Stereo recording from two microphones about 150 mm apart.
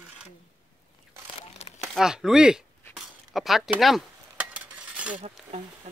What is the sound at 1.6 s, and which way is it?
Crumpling, 45° left (ahead or behind).